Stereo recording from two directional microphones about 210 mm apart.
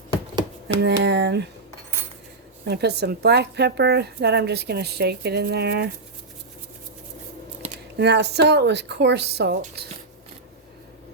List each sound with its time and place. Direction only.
0.8 s a woman's voice: 55° right (ahead or behind)
2.6 s a woman's voice: 50° right (ahead or behind)
7.9 s a woman's voice: 55° right (ahead or behind)